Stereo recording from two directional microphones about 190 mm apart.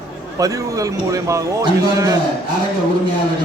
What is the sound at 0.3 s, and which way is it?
Speech, 20° right (ahead or behind).